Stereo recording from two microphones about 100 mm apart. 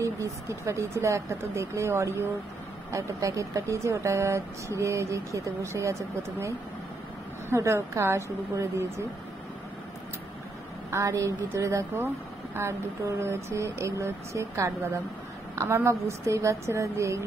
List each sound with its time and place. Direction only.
0.0 s speech: 30° right (ahead or behind)
10.9 s speech: 35° right (ahead or behind)
13.2 s speech: 30° right (ahead or behind)